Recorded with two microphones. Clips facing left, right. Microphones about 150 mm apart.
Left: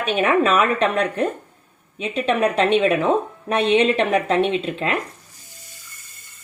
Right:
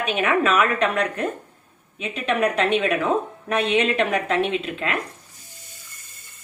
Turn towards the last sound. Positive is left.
turn(degrees=30)  # may be behind; listen again after turning